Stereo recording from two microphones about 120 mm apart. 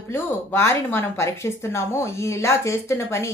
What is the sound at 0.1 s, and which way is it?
A woman's voice, 20° left (ahead or behind).